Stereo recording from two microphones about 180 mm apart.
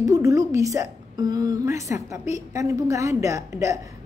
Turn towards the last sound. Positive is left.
turn(degrees=-15)  # may be behind; listen again after turning